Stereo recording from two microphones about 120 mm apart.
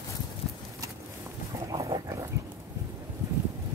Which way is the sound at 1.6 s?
30° right (ahead or behind).